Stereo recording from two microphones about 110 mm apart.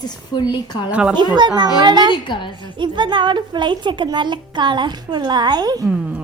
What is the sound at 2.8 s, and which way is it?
A child's voice, 45° right (ahead or behind).